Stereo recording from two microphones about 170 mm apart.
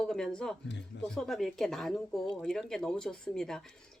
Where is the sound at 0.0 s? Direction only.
5° left (ahead or behind).